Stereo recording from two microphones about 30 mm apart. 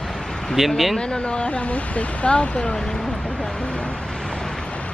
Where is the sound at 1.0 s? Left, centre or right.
Left.